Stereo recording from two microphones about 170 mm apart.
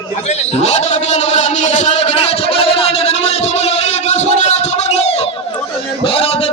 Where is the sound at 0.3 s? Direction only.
40° left (ahead or behind).